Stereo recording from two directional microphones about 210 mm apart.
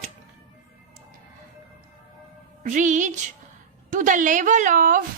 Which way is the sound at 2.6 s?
35° right (ahead or behind).